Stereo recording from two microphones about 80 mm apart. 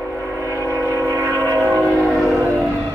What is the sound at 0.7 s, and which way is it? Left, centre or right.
Train, right.